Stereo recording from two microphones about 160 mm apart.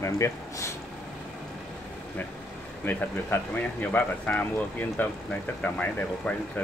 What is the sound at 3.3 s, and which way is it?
Speech, 15° left (ahead or behind).